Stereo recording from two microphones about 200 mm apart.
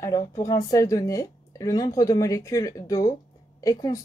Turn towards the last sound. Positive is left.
turn(degrees=15)  # may be behind; listen again after turning